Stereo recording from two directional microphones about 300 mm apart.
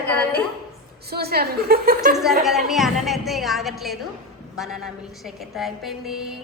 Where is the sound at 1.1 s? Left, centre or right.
Right.